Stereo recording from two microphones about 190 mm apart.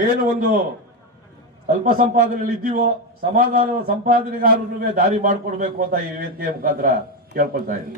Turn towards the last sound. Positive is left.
turn(degrees=-50)  # may be behind; listen again after turning